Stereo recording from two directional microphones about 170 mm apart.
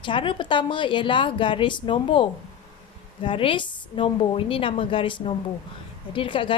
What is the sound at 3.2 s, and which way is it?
A woman's voice, 30° left (ahead or behind).